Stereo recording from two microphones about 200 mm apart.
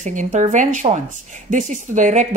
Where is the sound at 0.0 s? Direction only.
40° right (ahead or behind).